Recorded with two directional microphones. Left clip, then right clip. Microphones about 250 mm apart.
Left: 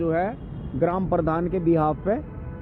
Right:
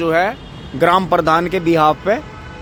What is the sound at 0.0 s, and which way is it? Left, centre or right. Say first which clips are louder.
A man's voice: right 9 dB; centre.